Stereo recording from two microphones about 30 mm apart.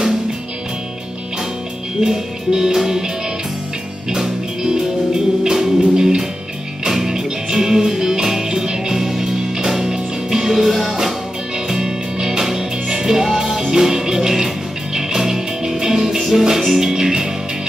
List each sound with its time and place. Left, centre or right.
2.0 s speech: centre
4.6 s music: right
5.9 s speech: right
6.9 s music: centre
10.5 s music: centre
11.5 s music: right
16.2 s music: centre